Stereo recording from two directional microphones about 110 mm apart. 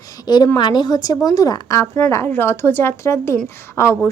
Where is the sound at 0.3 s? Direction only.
40° left (ahead or behind).